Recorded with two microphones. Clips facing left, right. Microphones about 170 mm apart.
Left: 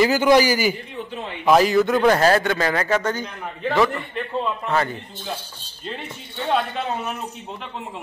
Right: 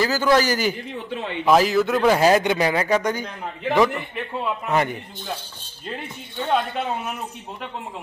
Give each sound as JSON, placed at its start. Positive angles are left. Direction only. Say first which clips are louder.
{"t": 0.0, "sound": "a man's voice", "louder": "left 3 dB", "side_deg": 15}